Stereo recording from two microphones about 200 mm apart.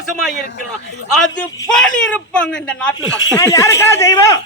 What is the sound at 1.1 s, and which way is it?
A man's voice, 5° left (ahead or behind).